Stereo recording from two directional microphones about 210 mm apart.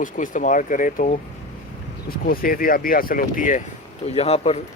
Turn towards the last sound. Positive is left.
turn(degrees=30)  # may be behind; listen again after turning